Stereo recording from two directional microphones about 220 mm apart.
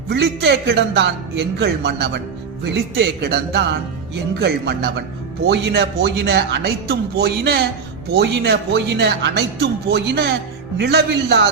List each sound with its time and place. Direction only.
0.1 s speech: 50° right (ahead or behind)